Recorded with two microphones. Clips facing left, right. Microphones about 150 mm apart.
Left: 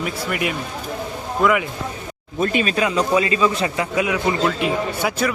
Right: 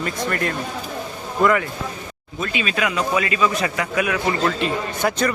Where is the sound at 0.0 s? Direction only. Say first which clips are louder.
Even; 10° left (ahead or behind).